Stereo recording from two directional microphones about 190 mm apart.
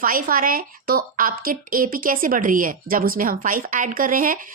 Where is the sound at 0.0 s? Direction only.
45° right (ahead or behind).